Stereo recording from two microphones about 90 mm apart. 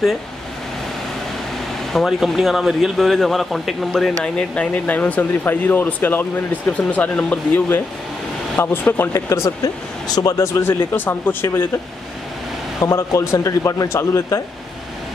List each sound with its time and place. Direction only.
1.9 s speech: centre (ahead or behind)
4.2 s speech: 10° left (ahead or behind); by 9.5 s 30° left (ahead or behind)
10.0 s a man's voice: 45° left (ahead or behind)
12.8 s a man's voice: 35° left (ahead or behind)